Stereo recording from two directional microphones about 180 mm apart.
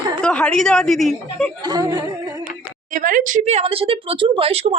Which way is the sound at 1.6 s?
20° right (ahead or behind).